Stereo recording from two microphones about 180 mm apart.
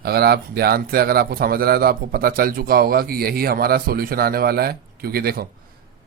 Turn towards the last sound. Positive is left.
turn(degrees=-60)  # may be behind; listen again after turning